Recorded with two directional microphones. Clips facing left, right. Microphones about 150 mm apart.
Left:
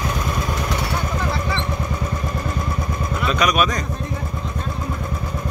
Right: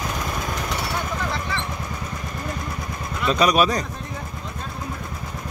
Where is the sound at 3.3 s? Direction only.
30° right (ahead or behind).